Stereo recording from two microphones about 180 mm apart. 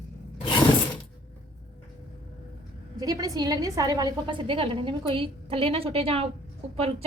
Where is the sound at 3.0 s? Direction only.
20° right (ahead or behind).